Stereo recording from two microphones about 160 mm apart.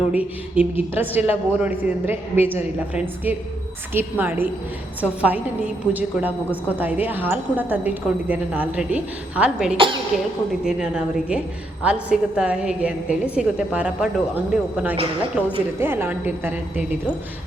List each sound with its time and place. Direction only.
0.1 s a woman's voice: 10° right (ahead or behind)
9.7 s speech: 30° right (ahead or behind)
10.6 s a woman's voice: 5° right (ahead or behind)